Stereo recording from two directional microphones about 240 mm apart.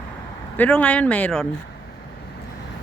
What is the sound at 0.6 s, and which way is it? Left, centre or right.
Speech, centre.